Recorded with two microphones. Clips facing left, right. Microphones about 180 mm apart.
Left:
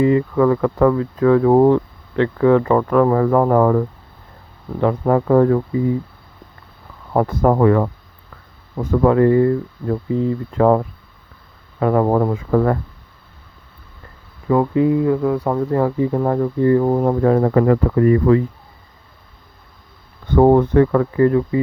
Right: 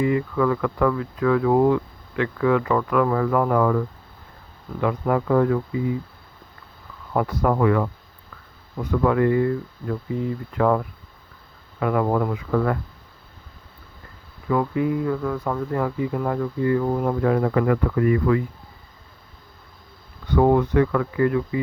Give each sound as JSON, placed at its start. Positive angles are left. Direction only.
{"t": 0.0, "sound": "speech", "side_deg": 30}
{"t": 2.1, "sound": "speech", "side_deg": 30}
{"t": 7.1, "sound": "speech", "side_deg": 45}
{"t": 14.4, "sound": "speech", "side_deg": 30}
{"t": 20.2, "sound": "speech", "side_deg": 45}